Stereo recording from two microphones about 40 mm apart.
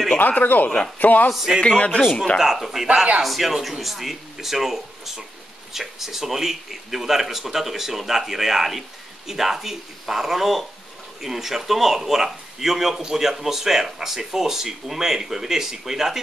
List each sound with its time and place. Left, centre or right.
0.2 s speech: left
1.3 s speech: centre
2.0 s speech: centre
2.3 s speech: centre